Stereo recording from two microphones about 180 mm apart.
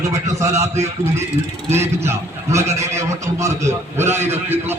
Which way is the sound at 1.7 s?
15° right (ahead or behind).